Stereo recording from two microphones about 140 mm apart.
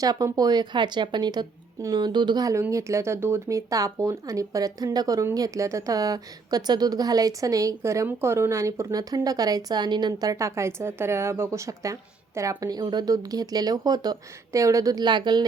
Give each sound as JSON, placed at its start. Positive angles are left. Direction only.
{"t": 0.0, "sound": "a woman's voice", "side_deg": -25}